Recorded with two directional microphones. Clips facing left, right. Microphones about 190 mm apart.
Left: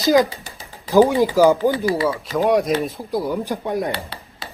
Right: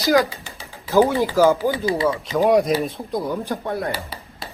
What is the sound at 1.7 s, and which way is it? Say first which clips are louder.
Speech: left 2 dB; 20° right (ahead or behind).